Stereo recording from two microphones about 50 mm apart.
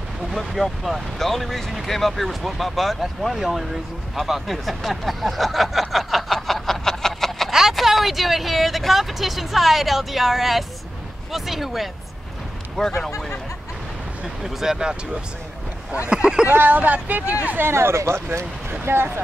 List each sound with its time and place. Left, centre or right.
0.3 s speech: centre
4.1 s a sound: centre
7.5 s speech: centre
12.8 s speech: centre
14.2 s speech: centre
16.1 s speech: centre
16.4 s speech: right
17.6 s speech: right